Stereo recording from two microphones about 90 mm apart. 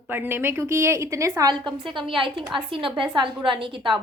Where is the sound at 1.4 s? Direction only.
55° right (ahead or behind).